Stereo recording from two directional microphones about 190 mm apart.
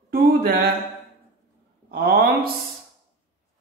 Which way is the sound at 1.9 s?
50° right (ahead or behind).